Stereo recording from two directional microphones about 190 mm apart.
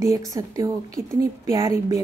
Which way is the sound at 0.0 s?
15° right (ahead or behind).